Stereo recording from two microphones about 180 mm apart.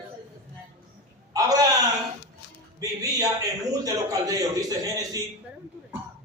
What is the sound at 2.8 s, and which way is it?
A man's voice, 20° right (ahead or behind).